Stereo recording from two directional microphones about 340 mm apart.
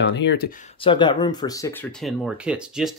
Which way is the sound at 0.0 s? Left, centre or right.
Left.